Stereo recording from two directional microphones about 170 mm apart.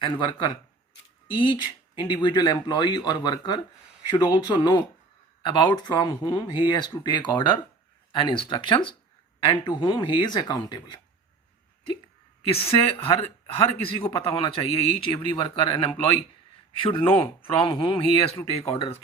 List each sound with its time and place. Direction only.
0.0 s speech: 30° left (ahead or behind)
12.5 s speech: 35° left (ahead or behind)